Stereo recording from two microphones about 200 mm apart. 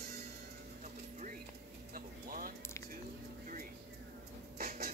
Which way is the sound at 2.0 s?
45° right (ahead or behind).